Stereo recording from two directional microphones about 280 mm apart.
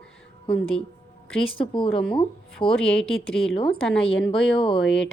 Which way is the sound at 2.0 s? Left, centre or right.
Centre.